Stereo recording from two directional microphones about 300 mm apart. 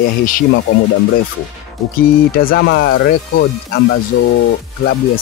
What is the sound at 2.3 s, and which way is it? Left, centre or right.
Speech, left.